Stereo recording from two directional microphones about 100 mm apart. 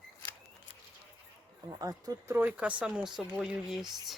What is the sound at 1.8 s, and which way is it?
Speech, 40° right (ahead or behind).